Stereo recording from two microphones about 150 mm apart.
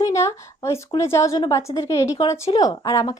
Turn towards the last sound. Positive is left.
turn(degrees=25)  # may be behind; listen again after turning